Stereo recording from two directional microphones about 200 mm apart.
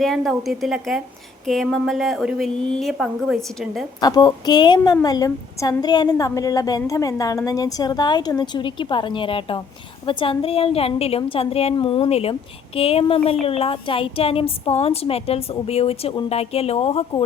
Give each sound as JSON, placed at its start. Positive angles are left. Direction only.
{"t": 0.0, "sound": "a woman's voice", "side_deg": 0}
{"t": 4.0, "sound": "a woman's voice", "side_deg": 20}